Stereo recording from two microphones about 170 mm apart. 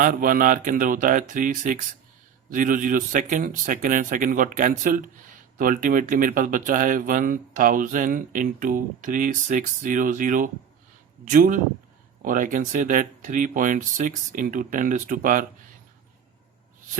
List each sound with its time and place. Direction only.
0.0 s speech: 55° right (ahead or behind)